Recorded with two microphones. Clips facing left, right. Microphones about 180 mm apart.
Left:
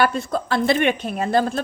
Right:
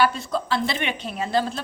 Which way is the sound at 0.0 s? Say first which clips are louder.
Left 2 dB; 50° left (ahead or behind).